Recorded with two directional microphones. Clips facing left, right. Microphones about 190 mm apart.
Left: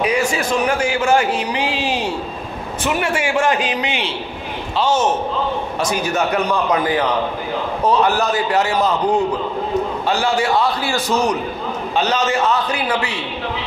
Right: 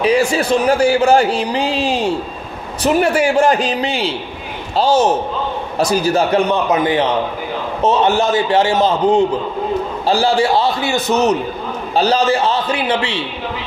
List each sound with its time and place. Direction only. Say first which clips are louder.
0.0 s a man's voice: right 4 dB; 30° right (ahead or behind)
11.9 s a man's voice: right 5 dB; 35° right (ahead or behind)